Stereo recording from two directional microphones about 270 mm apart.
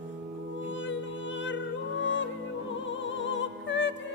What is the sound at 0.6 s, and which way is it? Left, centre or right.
Music, left.